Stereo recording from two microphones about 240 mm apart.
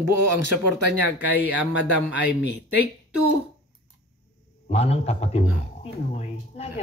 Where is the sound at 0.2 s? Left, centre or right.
Right.